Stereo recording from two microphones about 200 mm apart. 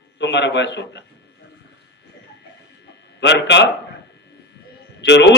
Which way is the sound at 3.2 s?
60° left (ahead or behind).